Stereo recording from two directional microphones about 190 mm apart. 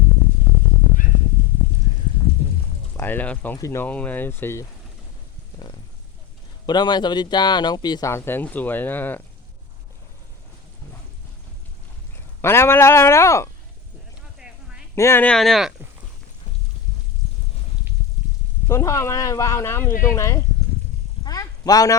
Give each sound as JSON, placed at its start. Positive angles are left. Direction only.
{"t": 3.0, "sound": "speech", "side_deg": 10}
{"t": 6.7, "sound": "speech", "side_deg": 20}
{"t": 12.1, "sound": "speech", "side_deg": 15}
{"t": 14.3, "sound": "a sound", "side_deg": -5}
{"t": 14.9, "sound": "speech", "side_deg": 15}
{"t": 18.7, "sound": "speech", "side_deg": 15}
{"t": 21.2, "sound": "a sound", "side_deg": 20}